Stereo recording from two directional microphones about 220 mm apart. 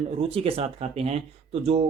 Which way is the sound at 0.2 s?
25° right (ahead or behind).